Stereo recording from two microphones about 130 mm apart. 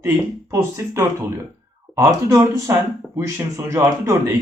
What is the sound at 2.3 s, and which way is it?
Speech, 25° right (ahead or behind).